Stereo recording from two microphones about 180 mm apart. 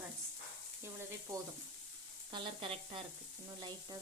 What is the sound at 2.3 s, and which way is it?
Sizzle, 30° right (ahead or behind).